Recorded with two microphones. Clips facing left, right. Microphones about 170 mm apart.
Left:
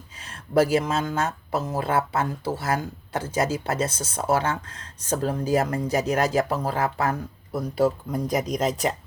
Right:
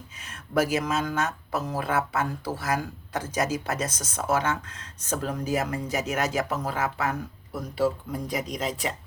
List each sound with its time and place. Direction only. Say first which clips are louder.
0.2 s speech: left 5 dB; 30° left (ahead or behind)